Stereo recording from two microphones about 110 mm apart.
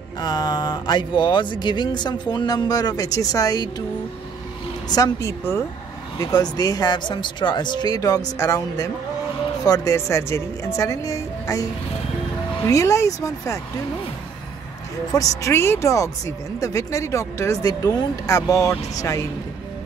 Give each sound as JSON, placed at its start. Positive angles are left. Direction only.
{"t": 0.2, "sound": "speech", "side_deg": 40}
{"t": 4.8, "sound": "a woman's voice", "side_deg": 35}
{"t": 12.6, "sound": "a woman's voice", "side_deg": 30}
{"t": 15.1, "sound": "speech", "side_deg": 30}